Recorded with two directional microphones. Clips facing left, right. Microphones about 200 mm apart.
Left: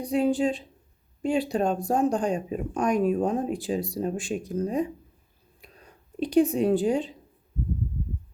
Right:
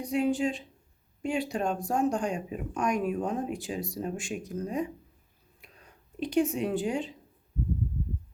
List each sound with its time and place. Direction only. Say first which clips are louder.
0.0 s speech: left 4 dB; 35° left (ahead or behind)